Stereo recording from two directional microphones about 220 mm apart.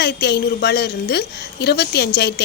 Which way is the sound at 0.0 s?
50° left (ahead or behind).